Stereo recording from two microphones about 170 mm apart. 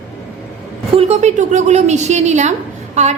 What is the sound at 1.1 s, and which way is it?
A woman's voice, 40° right (ahead or behind).